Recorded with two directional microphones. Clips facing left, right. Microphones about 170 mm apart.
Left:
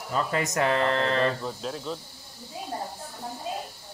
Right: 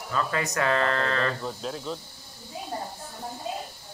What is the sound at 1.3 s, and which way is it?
Speech, centre (ahead or behind).